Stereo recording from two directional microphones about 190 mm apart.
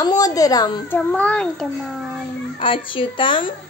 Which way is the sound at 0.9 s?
10° left (ahead or behind).